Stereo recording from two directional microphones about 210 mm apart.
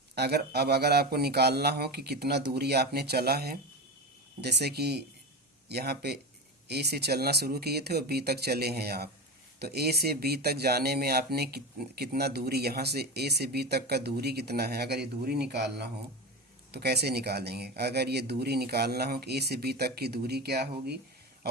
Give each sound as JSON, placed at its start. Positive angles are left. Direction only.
{"t": 0.2, "sound": "speech", "side_deg": -50}